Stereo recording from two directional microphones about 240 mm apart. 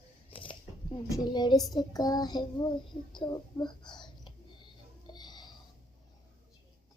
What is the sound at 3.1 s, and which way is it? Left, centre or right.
Whispering, centre.